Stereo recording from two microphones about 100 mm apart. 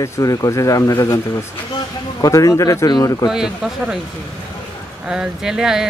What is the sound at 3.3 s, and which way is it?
Speech, 5° right (ahead or behind).